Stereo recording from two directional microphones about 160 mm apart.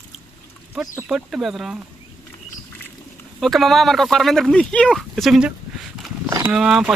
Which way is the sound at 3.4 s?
Centre (ahead or behind).